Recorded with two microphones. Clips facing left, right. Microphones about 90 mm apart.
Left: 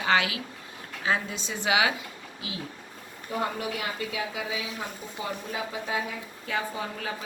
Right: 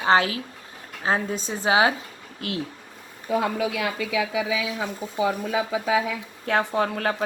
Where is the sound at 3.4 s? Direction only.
90° right.